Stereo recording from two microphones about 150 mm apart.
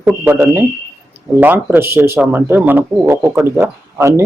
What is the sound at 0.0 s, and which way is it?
Speech, 15° right (ahead or behind).